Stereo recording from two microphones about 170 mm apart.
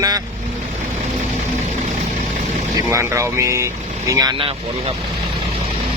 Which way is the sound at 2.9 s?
15° right (ahead or behind).